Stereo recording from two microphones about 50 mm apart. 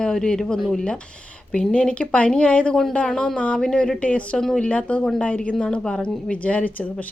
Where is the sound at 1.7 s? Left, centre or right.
Left.